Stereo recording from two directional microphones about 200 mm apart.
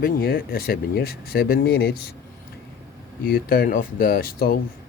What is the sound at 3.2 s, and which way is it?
Speech, 45° left (ahead or behind).